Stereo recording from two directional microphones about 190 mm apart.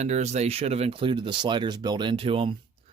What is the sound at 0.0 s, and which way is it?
Speech, 35° right (ahead or behind).